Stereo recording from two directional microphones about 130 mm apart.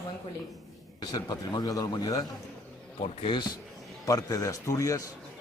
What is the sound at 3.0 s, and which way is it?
Speech, 40° left (ahead or behind).